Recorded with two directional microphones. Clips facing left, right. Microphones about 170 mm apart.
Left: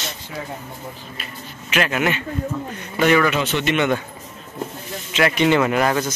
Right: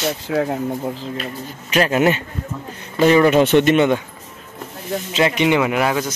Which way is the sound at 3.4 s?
55° right (ahead or behind).